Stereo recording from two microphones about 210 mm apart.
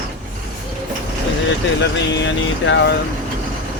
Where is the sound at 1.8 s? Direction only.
60° left (ahead or behind).